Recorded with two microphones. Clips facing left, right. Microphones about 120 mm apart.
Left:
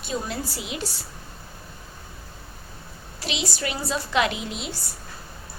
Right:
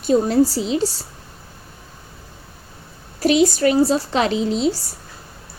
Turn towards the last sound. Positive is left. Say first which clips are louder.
# right 13 dB
turn(degrees=-35)  # may be behind; listen again after turning